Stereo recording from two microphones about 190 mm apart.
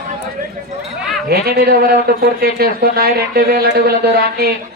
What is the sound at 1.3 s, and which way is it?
A man's voice, 55° right (ahead or behind).